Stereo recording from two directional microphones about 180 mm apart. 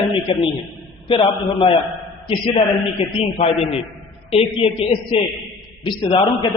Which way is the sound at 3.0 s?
35° left (ahead or behind).